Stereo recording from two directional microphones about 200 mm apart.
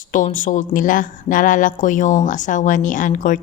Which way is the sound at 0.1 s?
40° left (ahead or behind).